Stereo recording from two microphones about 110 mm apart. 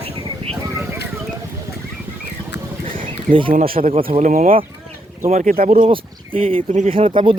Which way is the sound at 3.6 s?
65° right (ahead or behind).